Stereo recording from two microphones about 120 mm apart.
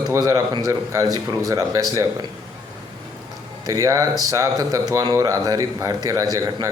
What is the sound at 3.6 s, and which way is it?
A man's voice, 30° right (ahead or behind).